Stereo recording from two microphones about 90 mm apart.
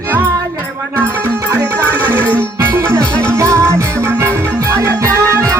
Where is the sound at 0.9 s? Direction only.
20° right (ahead or behind).